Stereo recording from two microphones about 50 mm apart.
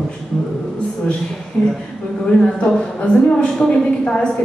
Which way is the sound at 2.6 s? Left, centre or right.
Centre.